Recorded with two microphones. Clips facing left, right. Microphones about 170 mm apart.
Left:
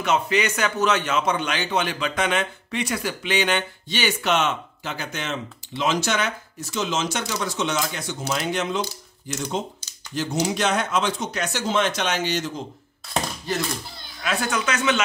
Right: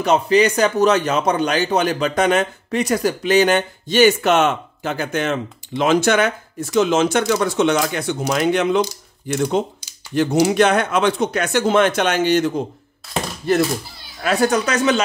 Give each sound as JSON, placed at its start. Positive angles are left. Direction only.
{"t": 0.0, "sound": "a man's voice", "side_deg": -35}
{"t": 14.2, "sound": "speech", "side_deg": -40}